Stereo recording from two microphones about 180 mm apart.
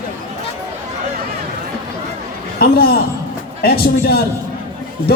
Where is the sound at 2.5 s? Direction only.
60° left (ahead or behind).